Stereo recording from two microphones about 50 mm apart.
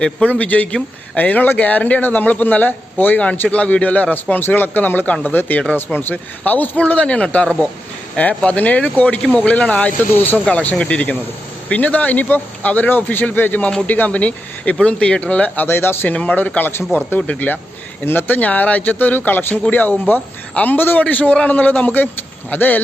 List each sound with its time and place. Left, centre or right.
0.3 s speech: left
8.4 s speech: left
10.4 s speech: left
15.6 s speech: left
16.1 s speech: left
18.0 s speech: left